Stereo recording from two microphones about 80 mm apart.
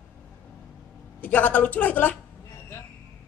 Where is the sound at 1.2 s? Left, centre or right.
Left.